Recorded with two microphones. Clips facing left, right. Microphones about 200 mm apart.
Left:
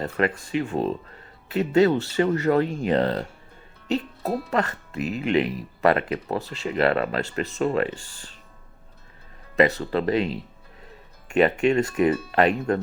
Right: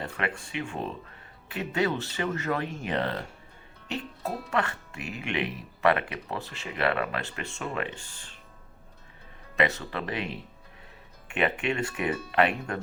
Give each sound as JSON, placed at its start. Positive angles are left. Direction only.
{"t": 0.0, "sound": "speech", "side_deg": 40}
{"t": 4.9, "sound": "speech", "side_deg": -15}
{"t": 5.2, "sound": "speech", "side_deg": 35}
{"t": 6.4, "sound": "speech", "side_deg": -15}
{"t": 6.7, "sound": "speech", "side_deg": 40}
{"t": 9.6, "sound": "speech", "side_deg": 35}
{"t": 11.3, "sound": "speech", "side_deg": 40}